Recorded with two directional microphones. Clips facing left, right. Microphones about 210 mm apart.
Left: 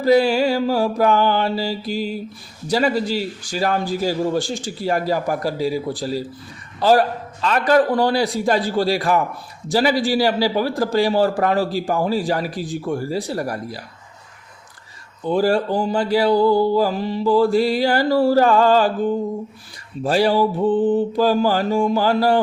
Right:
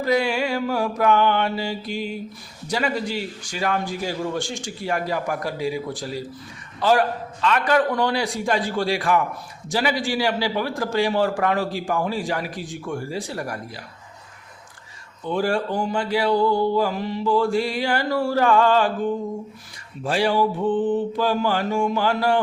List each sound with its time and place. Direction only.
0.0 s a man's voice: 35° left (ahead or behind)
15.2 s a man's voice: 35° left (ahead or behind)
20.1 s a man's voice: 35° left (ahead or behind)